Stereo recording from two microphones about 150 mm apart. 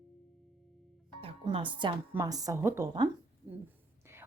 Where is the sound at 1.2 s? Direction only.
40° right (ahead or behind).